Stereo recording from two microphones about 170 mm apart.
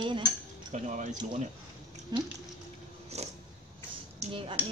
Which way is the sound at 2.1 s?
25° right (ahead or behind).